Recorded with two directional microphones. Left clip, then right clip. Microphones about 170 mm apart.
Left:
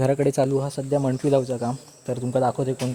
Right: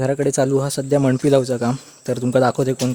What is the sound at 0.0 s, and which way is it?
Speech, 15° right (ahead or behind).